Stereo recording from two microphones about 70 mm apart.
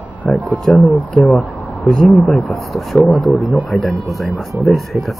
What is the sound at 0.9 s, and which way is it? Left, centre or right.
Speech, centre.